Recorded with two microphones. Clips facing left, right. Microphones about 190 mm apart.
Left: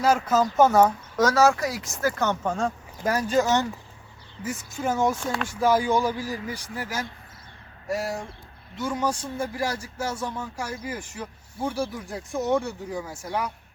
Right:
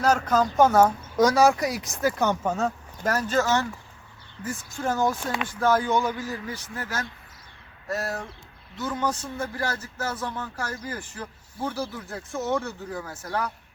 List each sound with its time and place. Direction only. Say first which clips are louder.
0.0 s speech: left 1 dB; 5° left (ahead or behind)
1.1 s speech: right 2 dB; 15° right (ahead or behind)
3.0 s speech: left 2 dB; 10° left (ahead or behind)
5.2 s speech: left 1 dB; 5° right (ahead or behind)
5.5 s speech: left 1 dB; 10° left (ahead or behind)
5.9 s a man's voice: left 1 dB; 30° left (ahead or behind)
6.5 s speech: left 1 dB; 10° left (ahead or behind)